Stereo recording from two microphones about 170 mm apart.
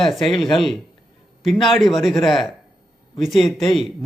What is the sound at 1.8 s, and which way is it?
Speech, centre (ahead or behind).